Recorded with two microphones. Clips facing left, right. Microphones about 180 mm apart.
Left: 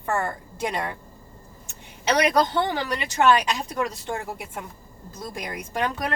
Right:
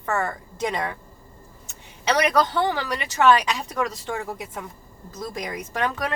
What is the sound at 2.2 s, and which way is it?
Speech, 30° left (ahead or behind).